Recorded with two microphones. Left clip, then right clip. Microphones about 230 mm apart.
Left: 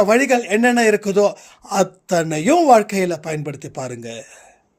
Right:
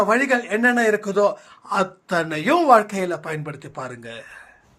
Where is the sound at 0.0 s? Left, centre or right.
Left.